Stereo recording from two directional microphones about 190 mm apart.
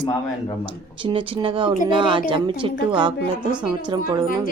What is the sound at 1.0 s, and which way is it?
A woman's voice, 25° right (ahead or behind).